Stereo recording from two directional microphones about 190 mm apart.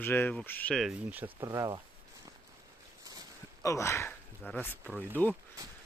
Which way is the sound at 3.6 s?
15° left (ahead or behind).